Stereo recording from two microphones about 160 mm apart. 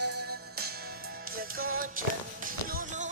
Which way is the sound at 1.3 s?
65° right (ahead or behind).